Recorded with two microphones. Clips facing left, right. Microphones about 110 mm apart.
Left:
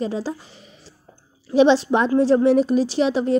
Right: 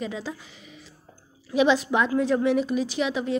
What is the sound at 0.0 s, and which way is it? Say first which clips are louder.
A woman's voice: left 7 dB; 35° left (ahead or behind).